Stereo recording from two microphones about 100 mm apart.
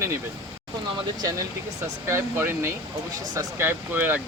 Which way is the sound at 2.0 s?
25° right (ahead or behind).